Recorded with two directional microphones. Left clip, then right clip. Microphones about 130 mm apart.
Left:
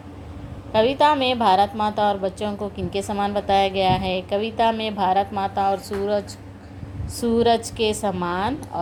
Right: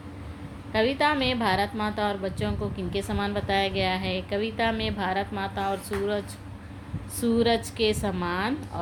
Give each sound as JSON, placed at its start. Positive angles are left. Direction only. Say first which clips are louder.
{"t": 0.7, "sound": "a woman's voice", "louder": "left 6 dB", "side_deg": 30}